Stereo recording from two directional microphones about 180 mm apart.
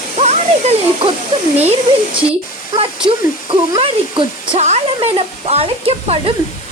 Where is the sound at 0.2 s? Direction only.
40° right (ahead or behind).